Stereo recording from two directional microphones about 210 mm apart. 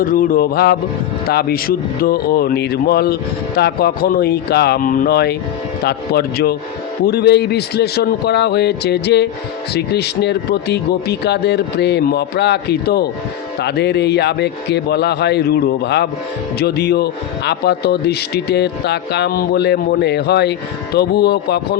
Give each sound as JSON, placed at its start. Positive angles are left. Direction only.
{"t": 0.0, "sound": "a man's voice", "side_deg": 45}